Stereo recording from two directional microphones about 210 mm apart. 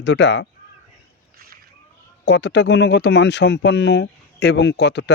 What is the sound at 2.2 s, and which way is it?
Speech, 55° left (ahead or behind).